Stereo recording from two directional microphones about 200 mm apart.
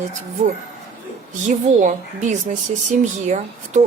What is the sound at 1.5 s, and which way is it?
Speech, 35° right (ahead or behind).